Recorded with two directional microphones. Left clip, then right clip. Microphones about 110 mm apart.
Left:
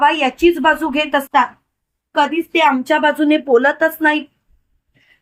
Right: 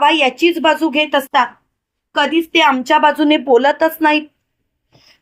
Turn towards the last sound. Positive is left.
turn(degrees=-60)  # may be behind; listen again after turning